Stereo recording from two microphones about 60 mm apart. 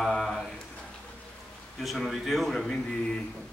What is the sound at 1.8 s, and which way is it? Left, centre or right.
Speech, centre.